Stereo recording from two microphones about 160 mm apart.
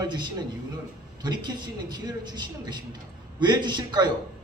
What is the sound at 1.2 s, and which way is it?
A man's voice, 25° right (ahead or behind).